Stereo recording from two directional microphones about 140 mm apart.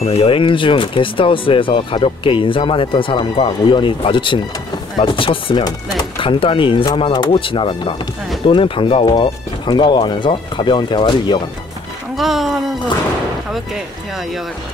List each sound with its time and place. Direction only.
0.0 s speech: 45° left (ahead or behind)
12.2 s speech: centre (ahead or behind)